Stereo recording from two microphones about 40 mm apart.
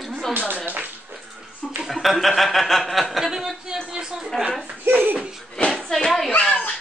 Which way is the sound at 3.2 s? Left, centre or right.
Centre.